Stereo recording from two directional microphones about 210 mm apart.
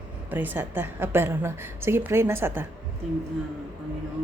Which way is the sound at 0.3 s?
10° right (ahead or behind).